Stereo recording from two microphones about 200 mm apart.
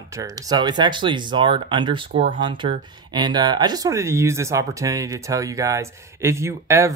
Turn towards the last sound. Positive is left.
turn(degrees=-15)  # may be behind; listen again after turning